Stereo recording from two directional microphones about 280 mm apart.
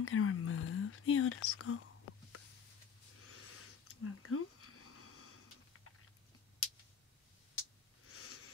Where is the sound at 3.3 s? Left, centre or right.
Left.